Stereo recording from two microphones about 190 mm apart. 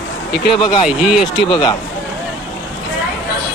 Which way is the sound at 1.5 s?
20° left (ahead or behind).